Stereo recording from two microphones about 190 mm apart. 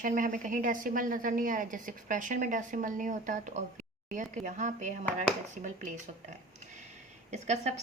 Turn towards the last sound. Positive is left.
turn(degrees=-35)  # may be behind; listen again after turning